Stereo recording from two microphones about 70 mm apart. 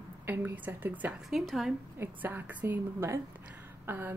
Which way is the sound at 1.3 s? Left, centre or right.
Centre.